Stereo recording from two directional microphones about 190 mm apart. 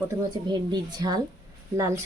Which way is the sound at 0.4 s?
20° right (ahead or behind).